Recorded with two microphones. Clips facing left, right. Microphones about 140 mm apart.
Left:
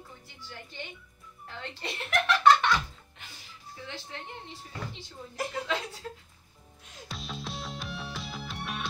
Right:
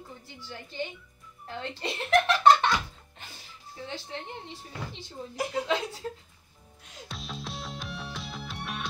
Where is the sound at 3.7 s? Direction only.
30° right (ahead or behind).